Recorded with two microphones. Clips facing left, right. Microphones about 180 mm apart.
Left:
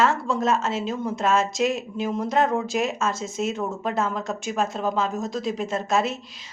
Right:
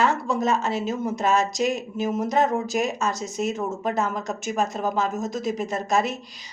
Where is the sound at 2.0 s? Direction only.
20° right (ahead or behind).